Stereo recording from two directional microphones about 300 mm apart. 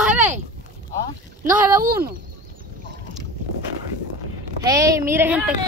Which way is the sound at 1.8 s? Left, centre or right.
Right.